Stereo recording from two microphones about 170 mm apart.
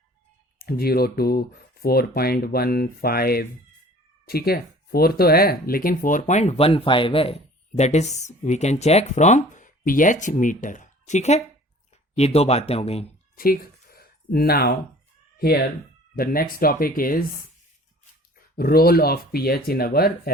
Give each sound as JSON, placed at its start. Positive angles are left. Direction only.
{"t": 0.6, "sound": "speech", "side_deg": 60}
{"t": 13.3, "sound": "a sound", "side_deg": 60}
{"t": 15.4, "sound": "speech", "side_deg": 65}
{"t": 18.5, "sound": "speech", "side_deg": 65}